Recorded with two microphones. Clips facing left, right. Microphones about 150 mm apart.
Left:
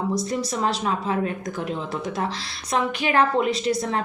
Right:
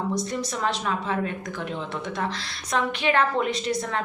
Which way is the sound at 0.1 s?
35° left (ahead or behind).